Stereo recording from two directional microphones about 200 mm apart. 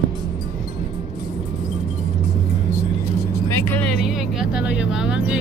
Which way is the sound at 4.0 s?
Centre (ahead or behind).